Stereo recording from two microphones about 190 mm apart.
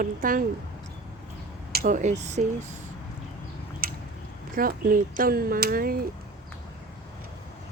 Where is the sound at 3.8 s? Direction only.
50° right (ahead or behind).